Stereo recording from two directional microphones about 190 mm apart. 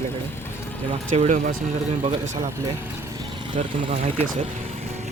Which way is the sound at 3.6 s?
40° right (ahead or behind).